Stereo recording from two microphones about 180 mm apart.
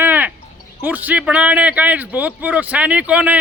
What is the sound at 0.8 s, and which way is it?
Speech, 10° right (ahead or behind).